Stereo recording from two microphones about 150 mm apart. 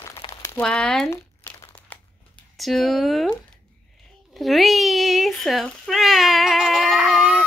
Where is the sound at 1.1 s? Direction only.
20° left (ahead or behind).